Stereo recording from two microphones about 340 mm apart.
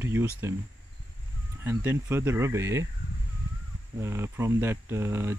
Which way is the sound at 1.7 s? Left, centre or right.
Centre.